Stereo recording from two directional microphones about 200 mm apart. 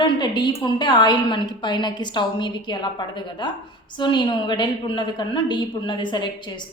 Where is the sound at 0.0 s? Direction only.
20° left (ahead or behind).